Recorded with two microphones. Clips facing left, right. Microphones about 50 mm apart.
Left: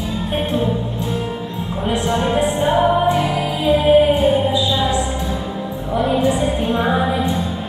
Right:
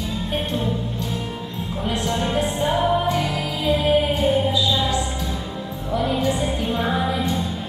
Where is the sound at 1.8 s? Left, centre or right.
Left.